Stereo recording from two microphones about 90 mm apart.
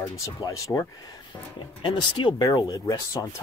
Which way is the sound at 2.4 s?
40° left (ahead or behind).